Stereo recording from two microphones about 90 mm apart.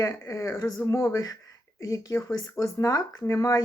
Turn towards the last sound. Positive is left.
turn(degrees=40)  # may be behind; listen again after turning